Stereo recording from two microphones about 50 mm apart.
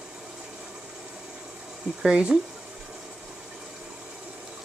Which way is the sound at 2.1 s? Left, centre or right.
Centre.